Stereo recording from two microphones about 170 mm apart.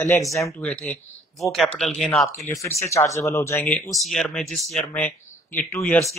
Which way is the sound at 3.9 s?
Centre (ahead or behind).